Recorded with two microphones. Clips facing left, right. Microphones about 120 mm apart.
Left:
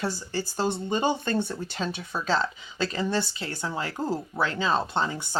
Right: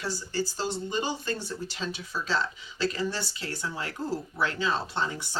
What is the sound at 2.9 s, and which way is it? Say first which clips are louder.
Speech: left 4 dB; 20° left (ahead or behind).